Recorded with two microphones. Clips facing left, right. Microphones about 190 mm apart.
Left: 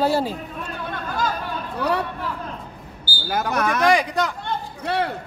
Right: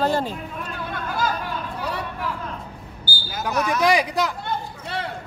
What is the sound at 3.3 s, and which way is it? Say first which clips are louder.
Speech: left 2 dB; 60° left (ahead or behind).